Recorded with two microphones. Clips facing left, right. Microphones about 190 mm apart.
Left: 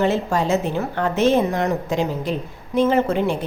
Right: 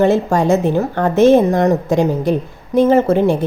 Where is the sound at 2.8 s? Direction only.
45° right (ahead or behind).